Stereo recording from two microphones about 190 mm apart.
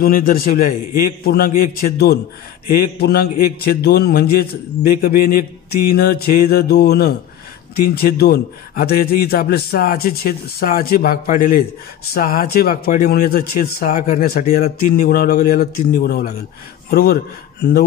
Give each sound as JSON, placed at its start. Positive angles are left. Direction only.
{"t": 0.0, "sound": "a man's voice", "side_deg": 50}